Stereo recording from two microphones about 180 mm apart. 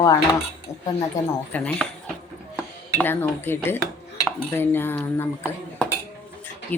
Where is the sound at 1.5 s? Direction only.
5° left (ahead or behind).